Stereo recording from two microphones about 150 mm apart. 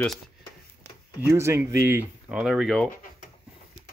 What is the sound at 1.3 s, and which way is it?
Speech, 20° right (ahead or behind).